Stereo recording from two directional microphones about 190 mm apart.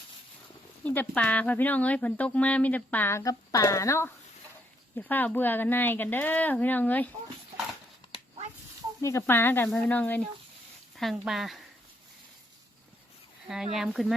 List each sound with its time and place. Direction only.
0.9 s speech: 10° left (ahead or behind)
8.0 s a sound: 25° left (ahead or behind)
9.0 s speech: 15° left (ahead or behind); by 11.6 s centre (ahead or behind)
13.7 s speech: centre (ahead or behind)